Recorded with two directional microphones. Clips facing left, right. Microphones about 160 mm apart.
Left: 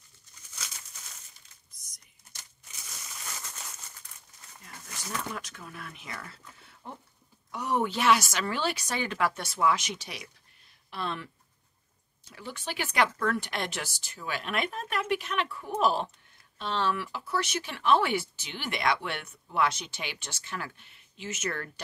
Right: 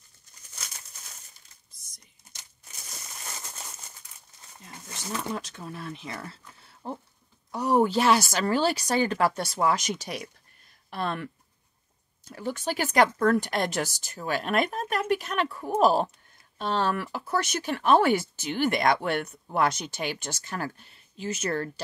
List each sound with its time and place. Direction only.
1.7 s a sound: 30° right (ahead or behind)
4.6 s speech: 25° right (ahead or behind); by 11.2 s 50° right (ahead or behind)
12.3 s speech: 45° right (ahead or behind)